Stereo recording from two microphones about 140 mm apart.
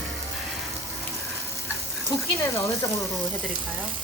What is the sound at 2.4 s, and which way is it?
Speech, 25° left (ahead or behind).